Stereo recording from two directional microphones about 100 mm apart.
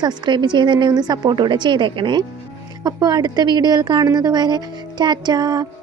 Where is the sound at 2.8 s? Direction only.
40° right (ahead or behind).